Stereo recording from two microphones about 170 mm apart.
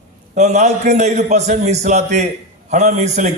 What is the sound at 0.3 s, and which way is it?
A man's voice, 45° right (ahead or behind).